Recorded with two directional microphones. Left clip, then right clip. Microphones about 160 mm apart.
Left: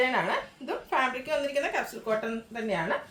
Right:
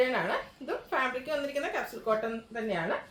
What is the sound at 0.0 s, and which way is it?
A woman's voice, 15° left (ahead or behind).